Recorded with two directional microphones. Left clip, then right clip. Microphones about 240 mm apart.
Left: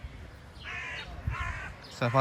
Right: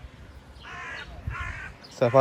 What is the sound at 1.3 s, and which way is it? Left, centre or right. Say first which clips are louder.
Crow: right 1 dB; centre.